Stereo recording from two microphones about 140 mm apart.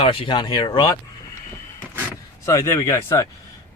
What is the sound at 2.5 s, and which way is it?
Speech, 20° left (ahead or behind).